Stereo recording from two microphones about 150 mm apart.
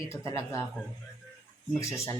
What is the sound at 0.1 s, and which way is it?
Speech, 20° left (ahead or behind).